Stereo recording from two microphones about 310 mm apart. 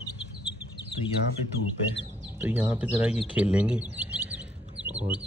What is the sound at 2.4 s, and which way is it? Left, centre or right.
Speech, centre.